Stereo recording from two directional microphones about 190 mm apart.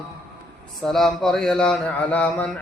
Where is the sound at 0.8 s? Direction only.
Centre (ahead or behind).